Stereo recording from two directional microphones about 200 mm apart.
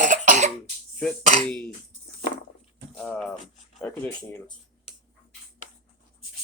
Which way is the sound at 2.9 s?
5° left (ahead or behind).